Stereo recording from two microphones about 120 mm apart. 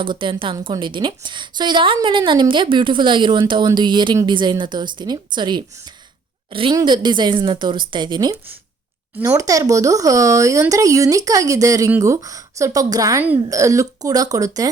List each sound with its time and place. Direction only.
0.0 s a woman's voice: 45° right (ahead or behind)
9.4 s speech: 30° right (ahead or behind)